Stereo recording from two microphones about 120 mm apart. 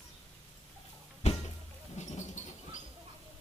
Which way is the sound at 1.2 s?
60° left (ahead or behind).